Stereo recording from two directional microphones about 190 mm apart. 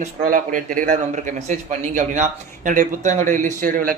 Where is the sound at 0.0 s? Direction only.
45° right (ahead or behind).